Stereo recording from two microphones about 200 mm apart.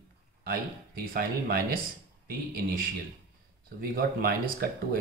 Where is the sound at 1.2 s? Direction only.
50° right (ahead or behind).